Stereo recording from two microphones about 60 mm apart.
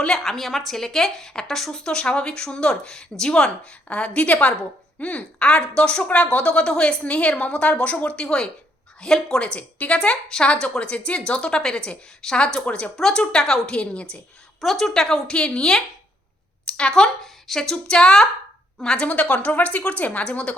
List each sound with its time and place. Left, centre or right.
0.0 s a woman's voice: centre
14.6 s a woman's voice: centre